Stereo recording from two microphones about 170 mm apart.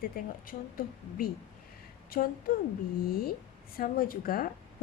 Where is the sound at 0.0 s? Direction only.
60° left (ahead or behind).